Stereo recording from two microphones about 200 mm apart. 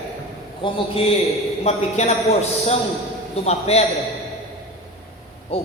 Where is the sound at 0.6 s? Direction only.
25° left (ahead or behind).